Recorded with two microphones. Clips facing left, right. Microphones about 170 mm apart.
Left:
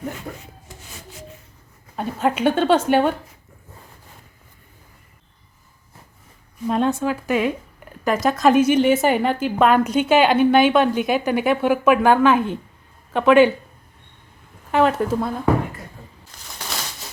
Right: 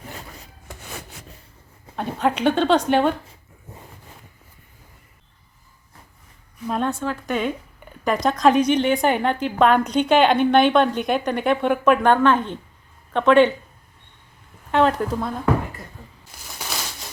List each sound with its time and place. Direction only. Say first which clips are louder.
0.7 s rub: right 5 dB; 60° right (ahead or behind)
2.0 s a woman's voice: left 1 dB; 5° left (ahead or behind)
6.7 s a woman's voice: left 4 dB; centre (ahead or behind)
14.7 s a woman's voice: left 1 dB; 5° left (ahead or behind)
16.3 s a sound: even; 5° right (ahead or behind)